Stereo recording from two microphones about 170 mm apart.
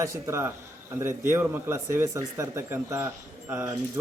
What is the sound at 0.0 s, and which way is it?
Speech, 15° right (ahead or behind).